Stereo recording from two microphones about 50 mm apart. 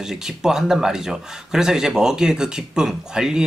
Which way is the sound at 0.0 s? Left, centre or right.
Centre.